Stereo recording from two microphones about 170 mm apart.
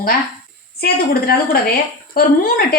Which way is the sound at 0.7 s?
65° left (ahead or behind).